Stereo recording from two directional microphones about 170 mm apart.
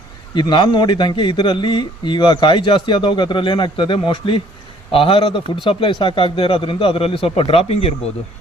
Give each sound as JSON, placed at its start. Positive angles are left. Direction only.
{"t": 0.3, "sound": "a man's voice", "side_deg": 25}